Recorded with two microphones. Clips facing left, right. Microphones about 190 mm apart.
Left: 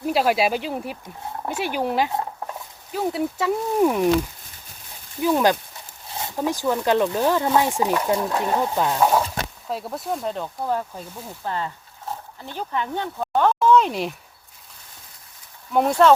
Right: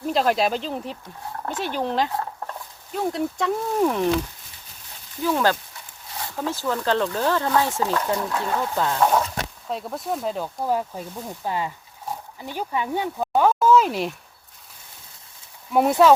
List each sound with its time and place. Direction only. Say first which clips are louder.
0.0 s speech: left 1 dB; 10° left (ahead or behind)
5.2 s speech: left 3 dB; 15° left (ahead or behind); by 14.2 s centre (ahead or behind)
15.7 s speech: even; 5° right (ahead or behind)